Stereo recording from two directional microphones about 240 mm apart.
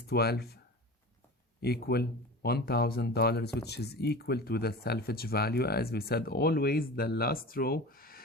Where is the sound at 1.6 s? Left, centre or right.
Left.